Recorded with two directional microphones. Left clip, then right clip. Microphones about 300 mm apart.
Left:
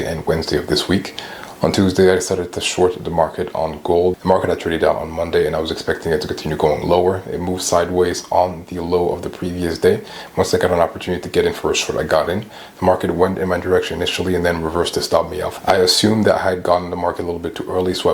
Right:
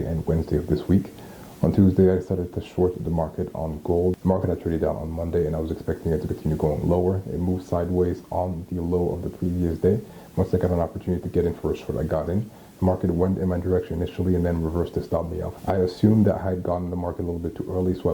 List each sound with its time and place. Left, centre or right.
0.0 s speech: centre
3.8 s speech: left
4.3 s speech: centre
8.9 s speech: left
9.6 s speech: centre